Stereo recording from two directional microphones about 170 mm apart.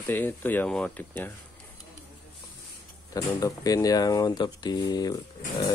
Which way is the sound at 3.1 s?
20° left (ahead or behind).